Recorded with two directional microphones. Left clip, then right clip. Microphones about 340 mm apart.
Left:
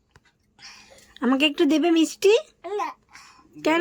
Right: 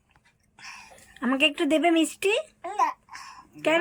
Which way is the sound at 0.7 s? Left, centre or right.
Centre.